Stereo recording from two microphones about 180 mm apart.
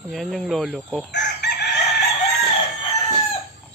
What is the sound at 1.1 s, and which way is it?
Chicken, 75° left (ahead or behind).